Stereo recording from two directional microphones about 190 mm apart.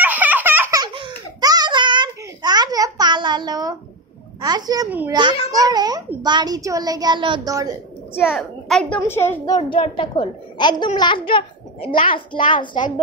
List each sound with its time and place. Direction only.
0.0 s baby laughter: 10° right (ahead or behind)
4.4 s a woman's voice: 20° right (ahead or behind)
8.1 s a woman's voice: centre (ahead or behind)
9.6 s a child's voice: 25° left (ahead or behind)